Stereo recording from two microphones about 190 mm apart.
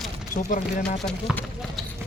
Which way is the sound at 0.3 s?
45° left (ahead or behind).